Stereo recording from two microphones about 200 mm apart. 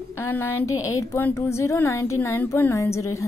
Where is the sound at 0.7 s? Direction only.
90° left.